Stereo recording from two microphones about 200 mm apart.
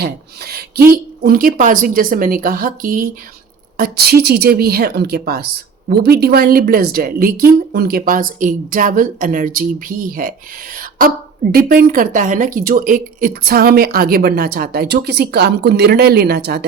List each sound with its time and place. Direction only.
0.0 s a woman's voice: 50° right (ahead or behind)